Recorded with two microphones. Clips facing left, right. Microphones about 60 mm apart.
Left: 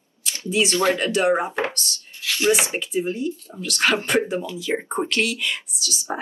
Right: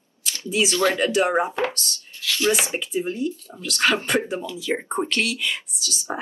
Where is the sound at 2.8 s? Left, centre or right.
Centre.